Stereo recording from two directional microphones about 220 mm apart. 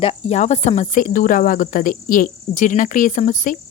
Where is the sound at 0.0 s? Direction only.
25° left (ahead or behind).